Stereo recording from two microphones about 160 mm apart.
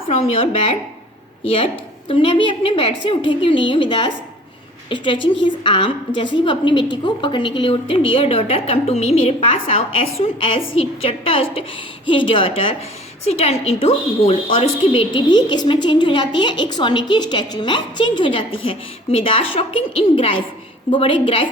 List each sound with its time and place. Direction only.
0.1 s a woman's voice: 40° left (ahead or behind)